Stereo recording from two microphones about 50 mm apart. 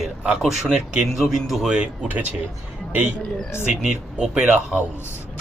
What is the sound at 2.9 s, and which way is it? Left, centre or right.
Speech, right.